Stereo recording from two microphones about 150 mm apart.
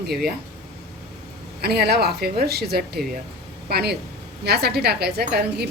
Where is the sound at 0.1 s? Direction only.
90° right.